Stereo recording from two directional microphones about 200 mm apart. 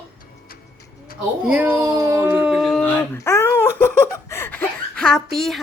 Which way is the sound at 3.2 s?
15° left (ahead or behind).